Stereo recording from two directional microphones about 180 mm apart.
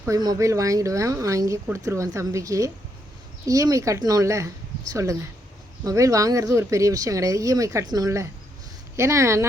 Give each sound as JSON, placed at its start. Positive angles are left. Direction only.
{"t": 0.0, "sound": "speech", "side_deg": -20}